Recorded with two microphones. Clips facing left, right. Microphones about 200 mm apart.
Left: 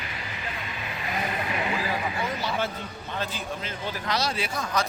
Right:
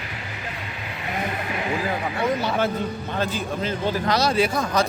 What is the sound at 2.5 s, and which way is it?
A man's voice, 50° right (ahead or behind).